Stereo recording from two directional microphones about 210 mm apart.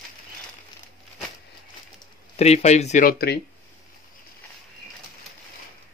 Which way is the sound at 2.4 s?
30° left (ahead or behind).